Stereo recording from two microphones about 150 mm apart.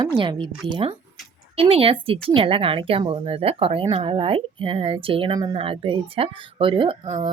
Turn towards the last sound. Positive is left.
turn(degrees=-30)  # may be behind; listen again after turning